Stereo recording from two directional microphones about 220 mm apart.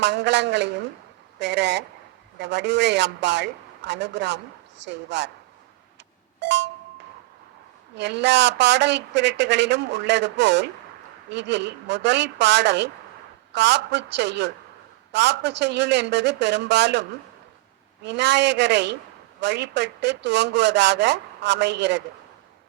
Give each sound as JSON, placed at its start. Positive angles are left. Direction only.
{"t": 0.0, "sound": "speech", "side_deg": -50}
{"t": 6.4, "sound": "music", "side_deg": -50}
{"t": 7.9, "sound": "speech", "side_deg": -50}